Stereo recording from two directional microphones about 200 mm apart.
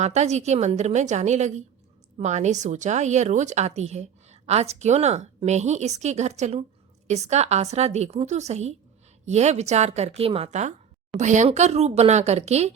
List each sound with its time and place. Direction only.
0.0 s speech: 35° right (ahead or behind)